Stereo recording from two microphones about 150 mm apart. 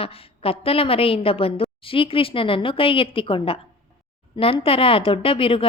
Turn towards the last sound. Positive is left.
turn(degrees=40)  # may be behind; listen again after turning